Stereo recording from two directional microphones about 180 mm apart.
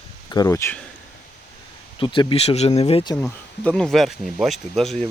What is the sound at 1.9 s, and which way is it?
Speech, 25° left (ahead or behind).